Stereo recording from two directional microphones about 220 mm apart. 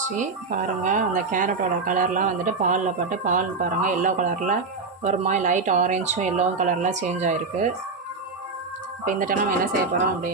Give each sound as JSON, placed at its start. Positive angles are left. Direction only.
{"t": 0.0, "sound": "speech", "side_deg": -35}
{"t": 9.0, "sound": "speech", "side_deg": -40}